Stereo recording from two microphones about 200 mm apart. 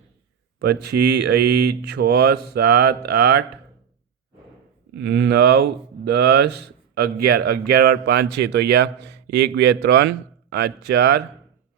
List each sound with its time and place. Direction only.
0.6 s speech: 55° right (ahead or behind)
4.9 s speech: 60° right (ahead or behind)